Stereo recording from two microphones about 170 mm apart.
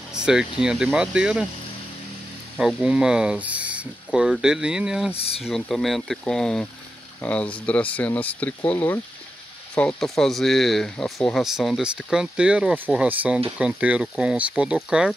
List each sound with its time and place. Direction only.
0.1 s speech: 5° right (ahead or behind)
2.5 s speech: 5° right (ahead or behind)
5.1 s speech: 35° left (ahead or behind)
5.4 s speech: centre (ahead or behind)